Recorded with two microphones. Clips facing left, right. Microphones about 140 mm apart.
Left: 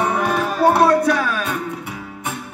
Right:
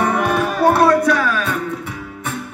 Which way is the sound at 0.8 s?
25° left (ahead or behind).